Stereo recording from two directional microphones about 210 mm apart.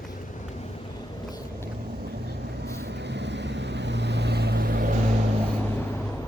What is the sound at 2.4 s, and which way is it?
Vehicle, 55° right (ahead or behind).